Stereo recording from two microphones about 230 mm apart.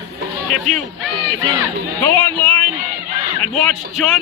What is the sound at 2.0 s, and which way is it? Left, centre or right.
Speech, centre.